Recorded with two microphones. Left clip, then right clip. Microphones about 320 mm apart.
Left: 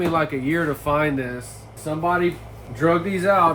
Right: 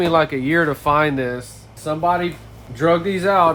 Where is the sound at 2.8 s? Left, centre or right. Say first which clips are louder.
Right 2 dB; right.